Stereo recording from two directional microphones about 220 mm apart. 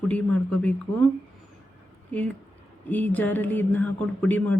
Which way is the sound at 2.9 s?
5° left (ahead or behind).